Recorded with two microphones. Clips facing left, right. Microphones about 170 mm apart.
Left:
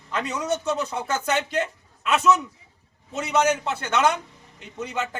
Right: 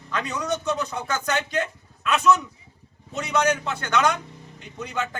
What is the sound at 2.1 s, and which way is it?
Speech, 5° left (ahead or behind).